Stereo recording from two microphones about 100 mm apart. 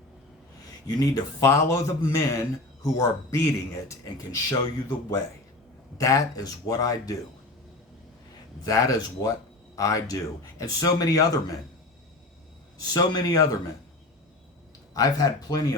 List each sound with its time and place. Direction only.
0.9 s speech: 35° left (ahead or behind)
8.6 s speech: 35° left (ahead or behind)
12.9 s speech: 35° left (ahead or behind)
14.9 s speech: 40° left (ahead or behind)